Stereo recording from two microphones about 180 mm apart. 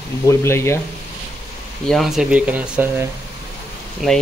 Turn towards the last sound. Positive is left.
turn(degrees=0)  # may be behind; listen again after turning